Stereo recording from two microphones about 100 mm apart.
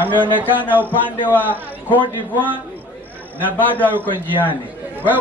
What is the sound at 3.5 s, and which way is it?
Speech, 15° left (ahead or behind).